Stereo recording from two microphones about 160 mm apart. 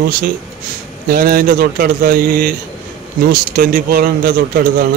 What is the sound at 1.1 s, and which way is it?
A man's voice, 65° right (ahead or behind).